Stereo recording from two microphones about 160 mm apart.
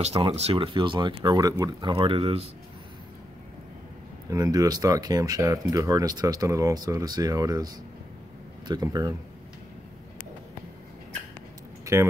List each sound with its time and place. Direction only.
0.0 s speech: 40° right (ahead or behind)
4.3 s speech: 20° right (ahead or behind)
11.8 s keys jangling: 15° right (ahead or behind)